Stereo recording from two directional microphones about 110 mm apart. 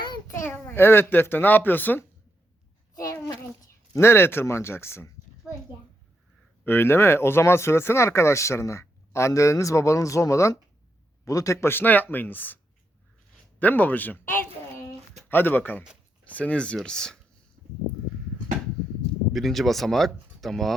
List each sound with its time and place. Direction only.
0.3 s a child's voice: 25° left (ahead or behind)
2.9 s a child's voice: 30° left (ahead or behind)
6.7 s speech: 20° left (ahead or behind)
13.6 s speech: 15° left (ahead or behind)
17.6 s a sound: 15° right (ahead or behind)
19.3 s speech: centre (ahead or behind)